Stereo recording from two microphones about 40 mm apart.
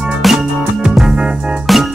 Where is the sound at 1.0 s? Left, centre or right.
Right.